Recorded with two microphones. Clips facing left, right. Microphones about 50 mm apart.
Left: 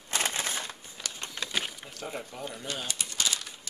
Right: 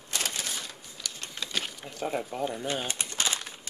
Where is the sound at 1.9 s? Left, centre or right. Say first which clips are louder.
Right 6 dB; centre.